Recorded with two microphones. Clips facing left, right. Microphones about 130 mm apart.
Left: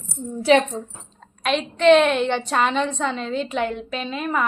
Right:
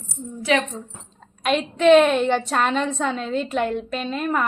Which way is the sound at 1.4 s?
5° right (ahead or behind).